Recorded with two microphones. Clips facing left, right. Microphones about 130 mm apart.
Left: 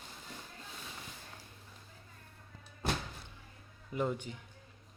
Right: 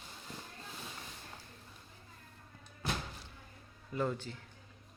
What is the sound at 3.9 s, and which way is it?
Speech, 15° left (ahead or behind).